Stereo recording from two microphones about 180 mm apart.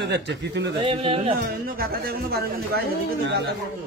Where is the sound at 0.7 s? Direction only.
30° right (ahead or behind).